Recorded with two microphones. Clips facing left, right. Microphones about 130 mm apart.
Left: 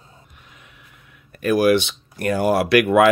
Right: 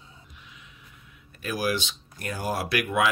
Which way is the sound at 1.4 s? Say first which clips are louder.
Left 12 dB; 65° left (ahead or behind).